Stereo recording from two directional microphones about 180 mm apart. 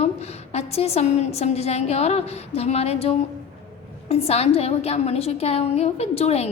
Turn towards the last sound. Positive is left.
turn(degrees=35)  # may be behind; listen again after turning